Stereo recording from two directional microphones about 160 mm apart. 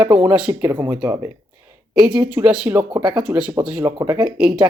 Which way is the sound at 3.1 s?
10° right (ahead or behind).